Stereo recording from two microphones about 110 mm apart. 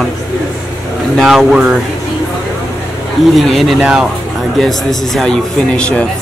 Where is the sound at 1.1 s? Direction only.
Centre (ahead or behind).